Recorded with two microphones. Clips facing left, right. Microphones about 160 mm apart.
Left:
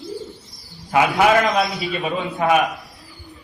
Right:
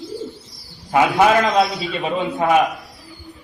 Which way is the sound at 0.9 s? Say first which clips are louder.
Right 1 dB; 25° right (ahead or behind).